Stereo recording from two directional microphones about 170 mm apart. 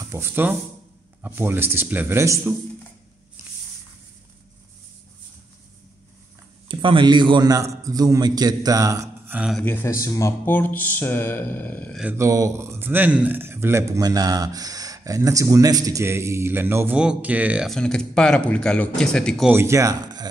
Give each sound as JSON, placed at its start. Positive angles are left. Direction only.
{"t": 0.1, "sound": "speech", "side_deg": -15}
{"t": 6.7, "sound": "a man's voice", "side_deg": -30}
{"t": 9.6, "sound": "speech", "side_deg": 10}
{"t": 12.0, "sound": "speech", "side_deg": -15}
{"t": 19.5, "sound": "speech", "side_deg": -15}